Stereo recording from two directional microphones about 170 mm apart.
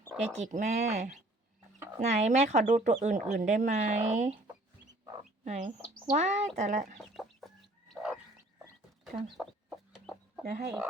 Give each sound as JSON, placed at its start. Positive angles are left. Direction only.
{"t": 0.3, "sound": "speech", "side_deg": -40}
{"t": 5.5, "sound": "speech", "side_deg": -45}
{"t": 7.0, "sound": "chicken", "side_deg": 0}
{"t": 10.4, "sound": "speech", "side_deg": -65}